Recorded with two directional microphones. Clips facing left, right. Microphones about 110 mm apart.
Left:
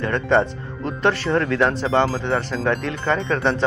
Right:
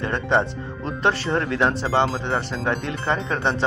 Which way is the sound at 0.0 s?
25° right (ahead or behind).